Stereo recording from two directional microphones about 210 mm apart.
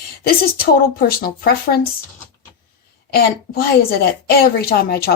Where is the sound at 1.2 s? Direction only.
45° left (ahead or behind).